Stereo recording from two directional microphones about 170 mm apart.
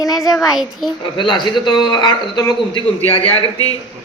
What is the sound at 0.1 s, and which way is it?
Speech, centre (ahead or behind).